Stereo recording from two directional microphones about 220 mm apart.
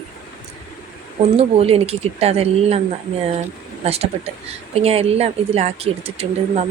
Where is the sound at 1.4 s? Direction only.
25° right (ahead or behind).